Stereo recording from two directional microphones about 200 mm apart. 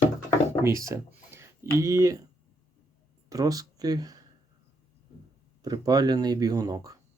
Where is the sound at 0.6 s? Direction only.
15° right (ahead or behind).